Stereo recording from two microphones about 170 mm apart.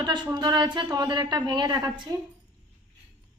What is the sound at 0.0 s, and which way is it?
A woman's voice, 25° right (ahead or behind).